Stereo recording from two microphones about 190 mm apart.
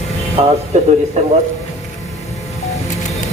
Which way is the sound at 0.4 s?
35° right (ahead or behind).